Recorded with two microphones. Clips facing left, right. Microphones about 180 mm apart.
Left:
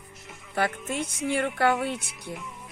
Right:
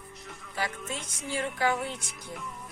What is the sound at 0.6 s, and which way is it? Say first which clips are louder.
A woman's voice: left 7 dB; 60° left (ahead or behind).